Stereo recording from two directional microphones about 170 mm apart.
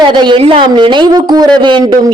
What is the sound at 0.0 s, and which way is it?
A man's voice, 25° right (ahead or behind).